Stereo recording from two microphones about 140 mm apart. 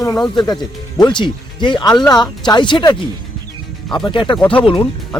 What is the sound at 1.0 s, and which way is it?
A man's voice, 35° left (ahead or behind).